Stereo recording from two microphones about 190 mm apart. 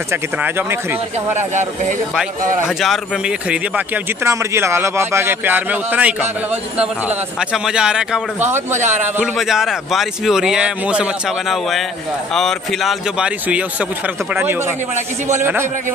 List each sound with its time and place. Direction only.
0.1 s speech: 10° right (ahead or behind)
1.3 s speech: 40° right (ahead or behind)
2.8 s a man's voice: centre (ahead or behind)
8.7 s speech: 40° right (ahead or behind)
9.1 s a man's voice: 5° right (ahead or behind)